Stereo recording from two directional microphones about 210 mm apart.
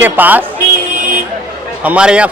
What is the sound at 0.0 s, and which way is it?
Speech, 10° right (ahead or behind).